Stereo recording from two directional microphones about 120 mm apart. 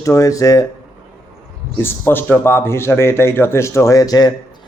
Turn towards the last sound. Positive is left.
turn(degrees=30)  # may be behind; listen again after turning